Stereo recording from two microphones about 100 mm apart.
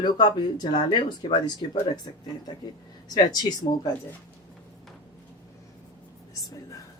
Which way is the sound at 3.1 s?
40° left (ahead or behind).